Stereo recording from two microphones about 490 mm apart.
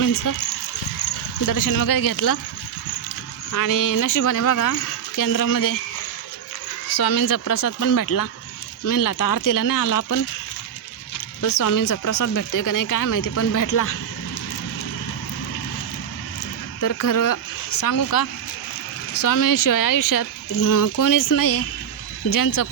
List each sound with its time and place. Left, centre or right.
0.0 s speech: left
1.5 s speech: left
3.5 s speech: left
6.9 s speech: left
11.4 s speech: left
16.8 s speech: left